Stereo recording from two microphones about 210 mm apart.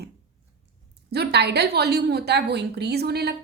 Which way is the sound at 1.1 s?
50° right (ahead or behind).